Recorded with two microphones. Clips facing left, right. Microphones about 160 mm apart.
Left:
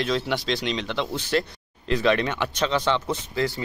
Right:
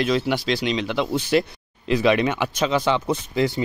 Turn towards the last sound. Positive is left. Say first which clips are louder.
# right 4 dB
turn(degrees=-20)  # may be behind; listen again after turning